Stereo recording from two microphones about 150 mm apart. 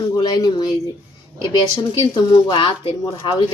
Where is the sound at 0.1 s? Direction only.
25° left (ahead or behind).